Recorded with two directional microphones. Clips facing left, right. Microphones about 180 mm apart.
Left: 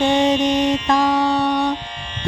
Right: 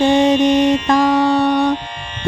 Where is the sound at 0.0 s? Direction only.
50° right (ahead or behind).